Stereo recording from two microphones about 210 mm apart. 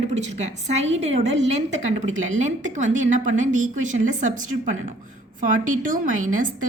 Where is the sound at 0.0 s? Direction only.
30° right (ahead or behind).